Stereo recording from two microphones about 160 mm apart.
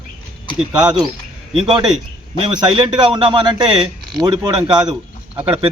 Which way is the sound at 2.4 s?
30° right (ahead or behind).